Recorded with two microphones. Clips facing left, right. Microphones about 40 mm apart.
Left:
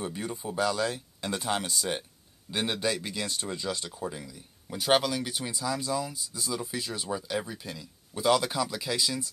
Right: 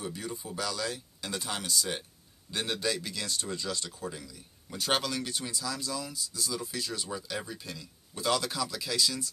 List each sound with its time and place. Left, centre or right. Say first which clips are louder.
0.0 s speech: left 4 dB; left